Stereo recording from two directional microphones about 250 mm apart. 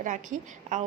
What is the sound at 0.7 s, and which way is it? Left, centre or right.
Speech, right.